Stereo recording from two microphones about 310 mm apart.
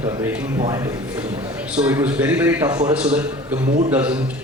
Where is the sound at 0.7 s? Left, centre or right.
Centre.